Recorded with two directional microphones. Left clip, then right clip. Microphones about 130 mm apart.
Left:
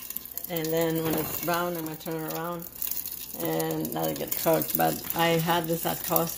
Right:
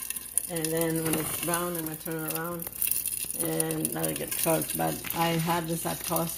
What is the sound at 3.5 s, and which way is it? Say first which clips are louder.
Speech: left 2 dB; 15° left (ahead or behind).